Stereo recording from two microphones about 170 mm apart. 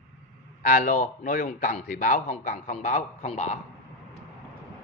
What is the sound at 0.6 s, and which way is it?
Speech, 50° left (ahead or behind).